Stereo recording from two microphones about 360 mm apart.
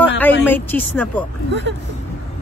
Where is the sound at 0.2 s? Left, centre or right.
Centre.